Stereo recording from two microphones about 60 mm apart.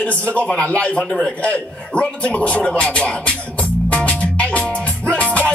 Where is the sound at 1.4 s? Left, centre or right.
Left.